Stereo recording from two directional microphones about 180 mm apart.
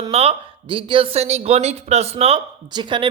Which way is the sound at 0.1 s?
35° right (ahead or behind).